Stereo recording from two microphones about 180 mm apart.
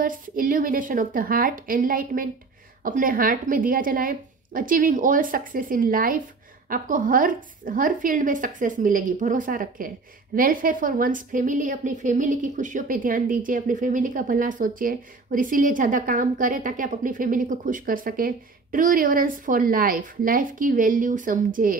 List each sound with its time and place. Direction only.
0.0 s a woman's voice: 50° right (ahead or behind)